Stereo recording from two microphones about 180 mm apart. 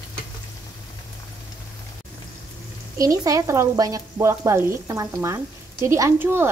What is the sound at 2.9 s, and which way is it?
A woman's voice, 20° right (ahead or behind).